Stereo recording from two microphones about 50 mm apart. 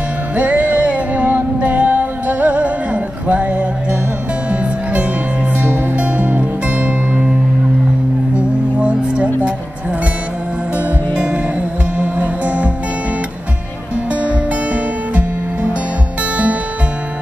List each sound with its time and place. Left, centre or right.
0.4 s music: right
8.4 s music: right
11.1 s music: right
14.1 s music: right